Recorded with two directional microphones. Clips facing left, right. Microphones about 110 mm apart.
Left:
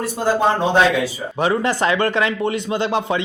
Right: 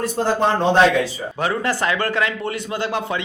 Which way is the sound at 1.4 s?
20° left (ahead or behind).